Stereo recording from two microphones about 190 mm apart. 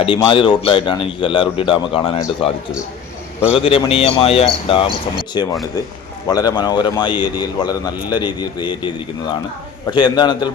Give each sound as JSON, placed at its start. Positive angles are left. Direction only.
{"t": 0.0, "sound": "a man's voice", "side_deg": 25}